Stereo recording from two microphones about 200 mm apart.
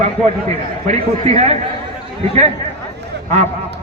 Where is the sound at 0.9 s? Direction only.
30° right (ahead or behind).